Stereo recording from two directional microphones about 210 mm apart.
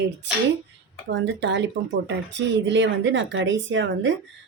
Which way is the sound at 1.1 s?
60° right (ahead or behind).